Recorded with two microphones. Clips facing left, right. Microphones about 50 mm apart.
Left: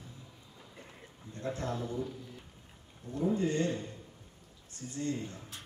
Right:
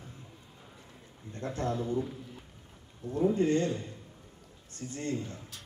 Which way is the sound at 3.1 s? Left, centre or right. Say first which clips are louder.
Right 4 dB; right.